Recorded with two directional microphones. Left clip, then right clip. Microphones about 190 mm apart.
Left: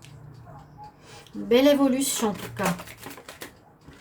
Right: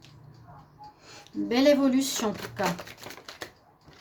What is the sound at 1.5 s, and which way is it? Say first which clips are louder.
Speech: left 3 dB; 45° right (ahead or behind).